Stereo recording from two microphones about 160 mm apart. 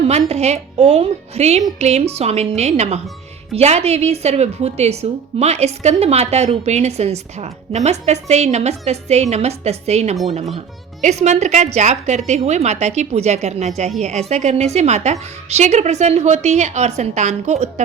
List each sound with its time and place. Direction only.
0.1 s a woman's voice: 40° right (ahead or behind)